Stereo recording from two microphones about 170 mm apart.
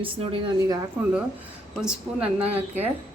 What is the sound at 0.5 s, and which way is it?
Speech, 20° right (ahead or behind).